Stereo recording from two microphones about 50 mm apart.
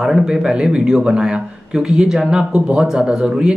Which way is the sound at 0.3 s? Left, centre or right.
Centre.